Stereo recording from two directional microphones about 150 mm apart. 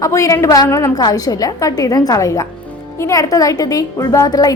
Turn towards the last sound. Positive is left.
turn(degrees=25)  # may be behind; listen again after turning